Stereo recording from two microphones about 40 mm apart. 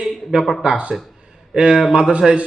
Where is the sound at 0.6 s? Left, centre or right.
Right.